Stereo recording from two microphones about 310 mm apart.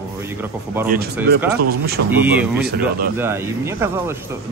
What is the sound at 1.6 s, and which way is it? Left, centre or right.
Speech, right.